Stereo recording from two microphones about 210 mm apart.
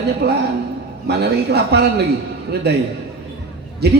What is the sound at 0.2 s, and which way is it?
Speech, 50° right (ahead or behind).